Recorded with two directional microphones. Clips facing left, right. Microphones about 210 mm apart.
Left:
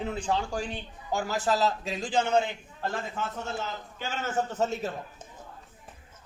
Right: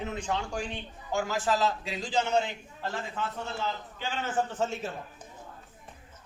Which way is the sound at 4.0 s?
45° left (ahead or behind).